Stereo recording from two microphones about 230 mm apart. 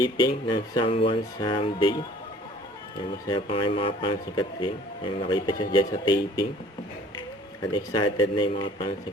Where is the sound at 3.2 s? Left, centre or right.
Left.